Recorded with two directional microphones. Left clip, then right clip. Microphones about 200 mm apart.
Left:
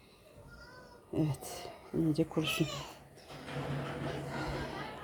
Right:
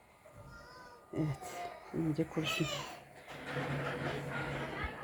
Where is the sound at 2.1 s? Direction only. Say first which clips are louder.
Even; 15° left (ahead or behind).